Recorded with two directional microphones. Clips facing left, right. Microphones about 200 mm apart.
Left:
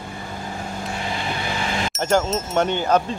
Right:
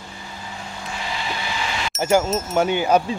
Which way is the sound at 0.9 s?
50° left (ahead or behind).